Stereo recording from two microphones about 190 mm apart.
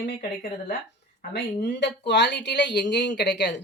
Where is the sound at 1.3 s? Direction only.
65° left (ahead or behind).